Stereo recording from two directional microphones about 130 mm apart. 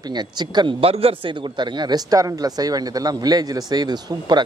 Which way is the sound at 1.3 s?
35° right (ahead or behind).